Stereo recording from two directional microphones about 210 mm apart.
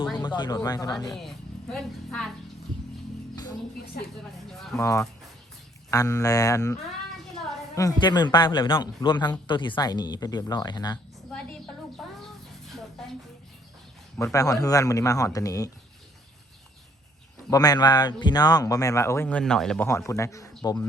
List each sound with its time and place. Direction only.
0.2 s speech: 20° left (ahead or behind)
1.1 s speech: centre (ahead or behind)
4.5 s speech: centre (ahead or behind)
4.8 s a man's voice: 15° left (ahead or behind)
7.8 s a man's voice: 20° left (ahead or behind)
13.0 s a sound: centre (ahead or behind)
14.3 s a man's voice: 15° left (ahead or behind)
17.5 s a man's voice: 20° left (ahead or behind)